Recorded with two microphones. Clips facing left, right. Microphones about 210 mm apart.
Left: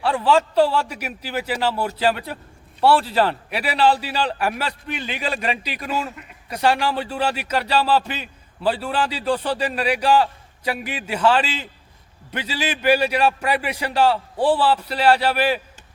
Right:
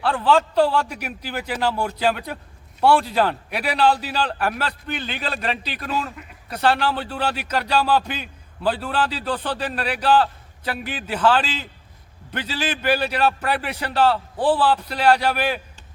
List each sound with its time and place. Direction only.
0.0 s a man's voice: 5° left (ahead or behind)